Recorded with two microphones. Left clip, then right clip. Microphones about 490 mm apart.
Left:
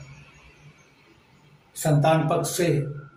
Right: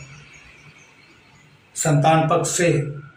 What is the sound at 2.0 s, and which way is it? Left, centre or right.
Speech, left.